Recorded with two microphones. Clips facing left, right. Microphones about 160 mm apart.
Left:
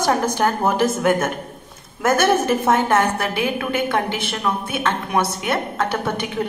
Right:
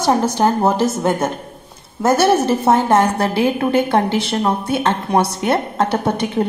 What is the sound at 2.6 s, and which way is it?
A woman's voice, 20° right (ahead or behind).